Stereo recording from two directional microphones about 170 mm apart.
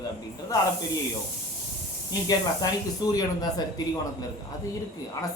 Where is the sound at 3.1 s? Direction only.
20° left (ahead or behind).